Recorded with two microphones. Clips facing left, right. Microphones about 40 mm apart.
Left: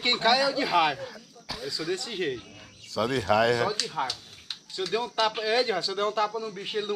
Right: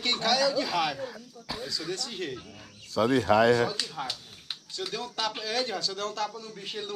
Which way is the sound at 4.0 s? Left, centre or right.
Centre.